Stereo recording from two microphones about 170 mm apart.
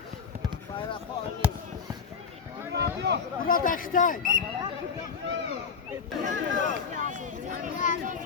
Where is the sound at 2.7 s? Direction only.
85° right.